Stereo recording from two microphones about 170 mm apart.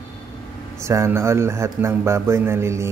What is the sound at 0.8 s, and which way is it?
Speech, 15° right (ahead or behind).